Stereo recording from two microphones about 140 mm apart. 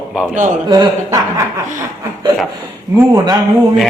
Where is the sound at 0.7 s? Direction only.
25° right (ahead or behind).